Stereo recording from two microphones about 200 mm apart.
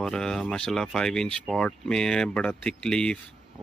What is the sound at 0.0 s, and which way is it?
Speech, 5° left (ahead or behind).